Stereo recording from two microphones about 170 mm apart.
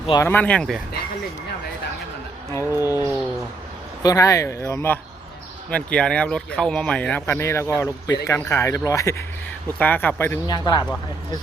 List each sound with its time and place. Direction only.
0.1 s speech: 15° left (ahead or behind)
2.7 s a sound: 15° right (ahead or behind)
4.0 s speech: 20° left (ahead or behind)
10.4 s a man's voice: 25° left (ahead or behind)